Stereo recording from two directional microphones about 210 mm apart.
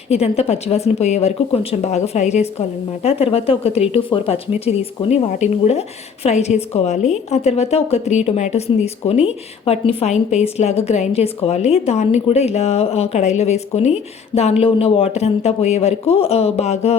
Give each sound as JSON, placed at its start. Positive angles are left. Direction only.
{"t": 0.1, "sound": "a woman's voice", "side_deg": 30}